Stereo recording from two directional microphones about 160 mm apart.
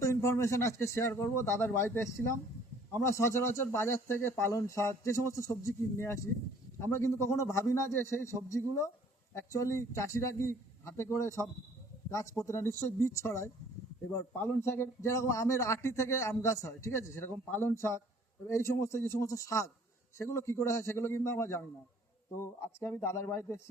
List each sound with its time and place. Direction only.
0.0 s speech: 20° left (ahead or behind)
22.6 s speech: 15° left (ahead or behind)